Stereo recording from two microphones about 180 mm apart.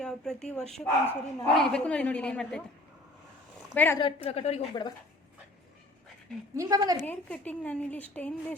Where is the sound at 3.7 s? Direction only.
10° left (ahead or behind).